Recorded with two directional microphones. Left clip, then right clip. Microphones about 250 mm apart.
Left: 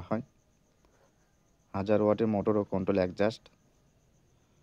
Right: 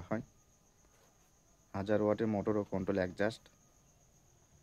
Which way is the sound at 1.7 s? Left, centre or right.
Left.